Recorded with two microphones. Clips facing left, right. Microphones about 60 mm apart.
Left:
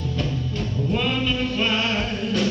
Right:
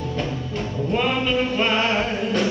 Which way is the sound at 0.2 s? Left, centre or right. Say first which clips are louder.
Left 1 dB; centre.